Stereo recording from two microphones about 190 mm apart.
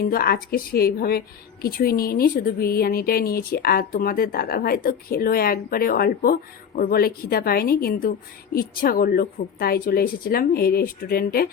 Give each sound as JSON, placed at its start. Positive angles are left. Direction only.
{"t": 0.0, "sound": "speech", "side_deg": 50}